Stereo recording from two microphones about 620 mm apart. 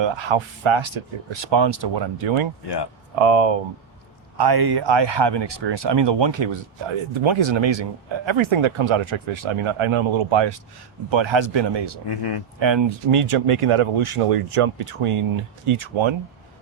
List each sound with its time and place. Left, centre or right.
0.0 s speech: right
2.6 s speech: left
3.2 s speech: right
4.4 s speech: right
12.0 s speech: left
12.5 s speech: right